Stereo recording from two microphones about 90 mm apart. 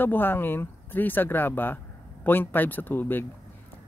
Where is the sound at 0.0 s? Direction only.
25° left (ahead or behind).